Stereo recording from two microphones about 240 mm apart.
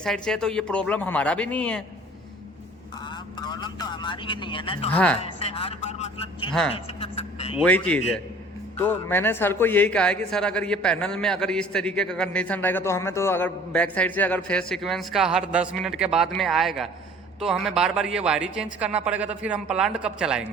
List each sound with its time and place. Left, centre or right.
0.0 s a man's voice: centre
3.4 s speech: centre
7.6 s a man's voice: centre